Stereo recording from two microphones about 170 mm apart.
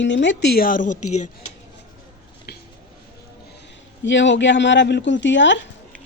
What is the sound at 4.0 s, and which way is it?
Speech, 90° left.